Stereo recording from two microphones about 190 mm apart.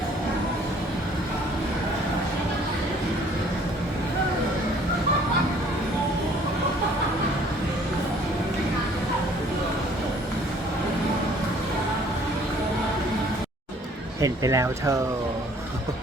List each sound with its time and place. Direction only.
14.2 s speech: 15° right (ahead or behind)